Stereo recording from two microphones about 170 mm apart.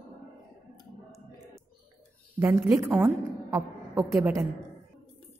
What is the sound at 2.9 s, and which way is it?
Speech, 10° right (ahead or behind).